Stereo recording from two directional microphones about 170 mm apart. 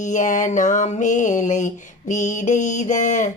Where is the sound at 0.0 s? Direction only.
45° left (ahead or behind).